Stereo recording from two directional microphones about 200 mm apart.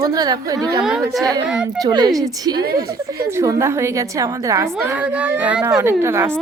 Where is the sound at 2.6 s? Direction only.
50° right (ahead or behind).